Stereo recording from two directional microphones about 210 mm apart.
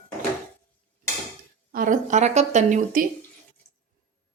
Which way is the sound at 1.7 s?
40° right (ahead or behind).